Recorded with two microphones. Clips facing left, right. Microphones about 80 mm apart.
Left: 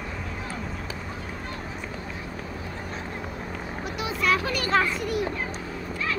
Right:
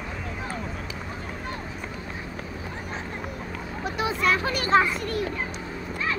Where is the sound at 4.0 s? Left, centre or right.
Right.